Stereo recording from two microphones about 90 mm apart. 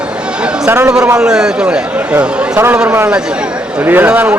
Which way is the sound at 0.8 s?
10° right (ahead or behind).